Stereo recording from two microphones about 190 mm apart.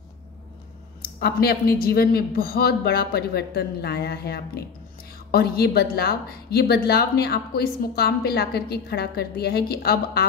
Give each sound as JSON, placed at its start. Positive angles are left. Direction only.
{"t": 1.2, "sound": "a woman's voice", "side_deg": 55}